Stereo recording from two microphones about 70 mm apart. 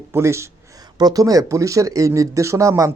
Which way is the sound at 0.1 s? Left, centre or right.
Right.